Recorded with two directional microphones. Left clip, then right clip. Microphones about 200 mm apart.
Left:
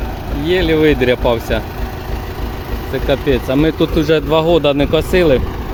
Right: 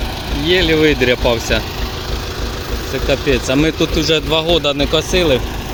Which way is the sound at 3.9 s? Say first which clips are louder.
Left 3 dB; 20° left (ahead or behind).